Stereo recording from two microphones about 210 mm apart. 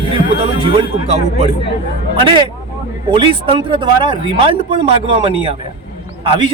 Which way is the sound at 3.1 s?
25° right (ahead or behind).